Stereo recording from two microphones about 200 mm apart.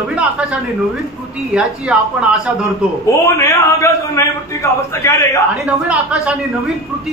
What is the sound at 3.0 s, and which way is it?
A man's voice, 15° left (ahead or behind).